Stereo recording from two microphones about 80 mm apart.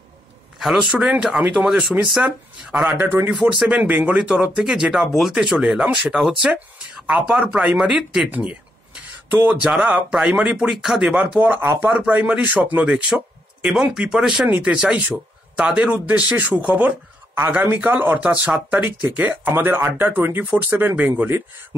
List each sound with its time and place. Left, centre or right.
0.6 s speech: centre; by 9.7 s right
9.7 s speech: centre
11.5 s speech: right
13.1 s a man's voice: centre